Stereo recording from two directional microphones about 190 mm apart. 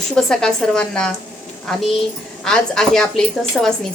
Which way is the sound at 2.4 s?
5° left (ahead or behind).